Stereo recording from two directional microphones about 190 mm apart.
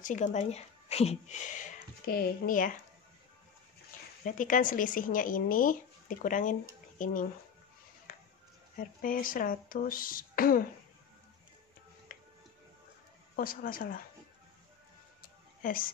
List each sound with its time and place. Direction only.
0.0 s a woman's voice: 40° left (ahead or behind)
1.6 s speech: 50° left (ahead or behind)
4.2 s speech: 45° left (ahead or behind)
8.1 s music: 45° left (ahead or behind)
8.7 s speech: 45° left (ahead or behind)
12.1 s music: 50° left (ahead or behind)
13.4 s speech: 50° left (ahead or behind)
15.2 s music: 45° left (ahead or behind)